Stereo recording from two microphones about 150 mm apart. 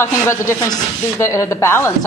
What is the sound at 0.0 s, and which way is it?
A woman's voice, 20° left (ahead or behind).